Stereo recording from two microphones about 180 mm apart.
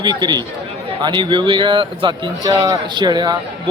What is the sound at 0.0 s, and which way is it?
A man's voice, 25° right (ahead or behind).